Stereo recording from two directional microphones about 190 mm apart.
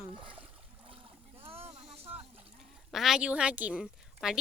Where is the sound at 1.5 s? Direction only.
30° right (ahead or behind).